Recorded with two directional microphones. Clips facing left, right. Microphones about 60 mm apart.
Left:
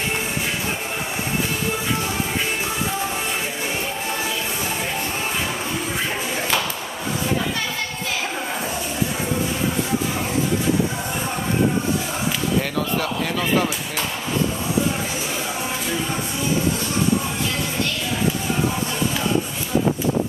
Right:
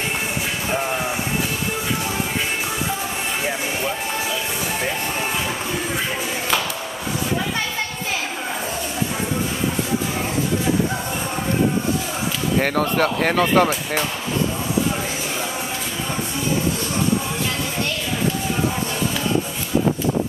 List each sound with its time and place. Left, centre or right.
12.5 s speech: right